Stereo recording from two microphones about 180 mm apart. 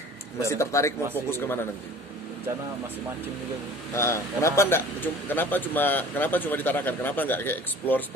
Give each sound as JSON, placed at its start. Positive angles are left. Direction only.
{"t": 0.4, "sound": "speech", "side_deg": 15}
{"t": 3.9, "sound": "speech", "side_deg": 15}